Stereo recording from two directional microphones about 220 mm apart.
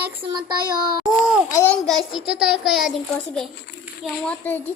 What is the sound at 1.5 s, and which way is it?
A child's voice, 10° left (ahead or behind).